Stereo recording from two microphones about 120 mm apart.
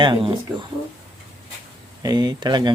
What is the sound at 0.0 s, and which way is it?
Speech, 45° right (ahead or behind).